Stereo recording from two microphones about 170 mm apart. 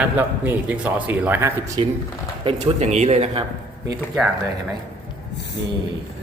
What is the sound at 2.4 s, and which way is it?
Speech, 40° right (ahead or behind).